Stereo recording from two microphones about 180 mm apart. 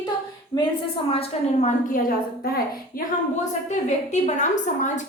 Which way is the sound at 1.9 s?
55° left (ahead or behind).